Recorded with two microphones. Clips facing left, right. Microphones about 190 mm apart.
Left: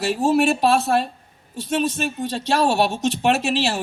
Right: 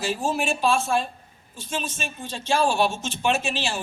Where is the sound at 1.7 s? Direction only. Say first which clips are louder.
Left 9 dB; 65° left (ahead or behind).